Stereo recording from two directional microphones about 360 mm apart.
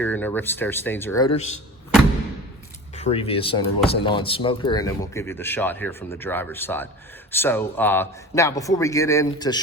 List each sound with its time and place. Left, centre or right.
0.0 s speech: centre
2.9 s speech: centre